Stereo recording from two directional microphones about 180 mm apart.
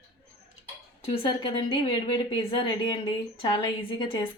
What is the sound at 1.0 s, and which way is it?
A woman's voice, 30° left (ahead or behind).